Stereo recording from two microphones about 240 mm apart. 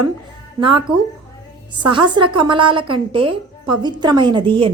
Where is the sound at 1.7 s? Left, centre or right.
Centre.